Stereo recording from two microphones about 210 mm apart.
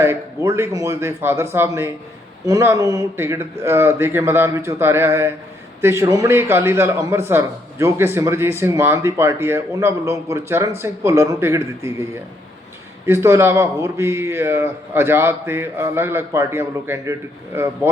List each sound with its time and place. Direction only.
0.0 s a man's voice: 10° right (ahead or behind)
13.1 s a man's voice: 10° right (ahead or behind)